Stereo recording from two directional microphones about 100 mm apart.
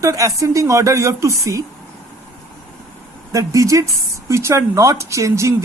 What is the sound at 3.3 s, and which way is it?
Speech, 35° right (ahead or behind).